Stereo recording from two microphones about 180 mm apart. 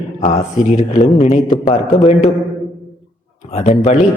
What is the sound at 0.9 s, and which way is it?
Speech, 40° left (ahead or behind).